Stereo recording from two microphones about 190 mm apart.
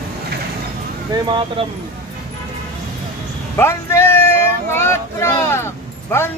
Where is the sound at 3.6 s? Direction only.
15° left (ahead or behind).